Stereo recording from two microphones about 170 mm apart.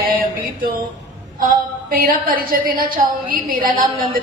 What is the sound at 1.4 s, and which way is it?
A woman's voice, 55° right (ahead or behind).